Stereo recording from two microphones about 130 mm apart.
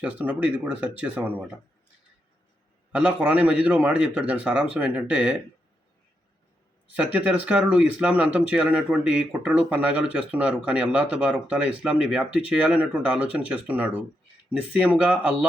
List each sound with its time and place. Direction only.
0.0 s speech: 10° right (ahead or behind)
2.9 s speech: 10° right (ahead or behind)
6.9 s speech: 10° right (ahead or behind)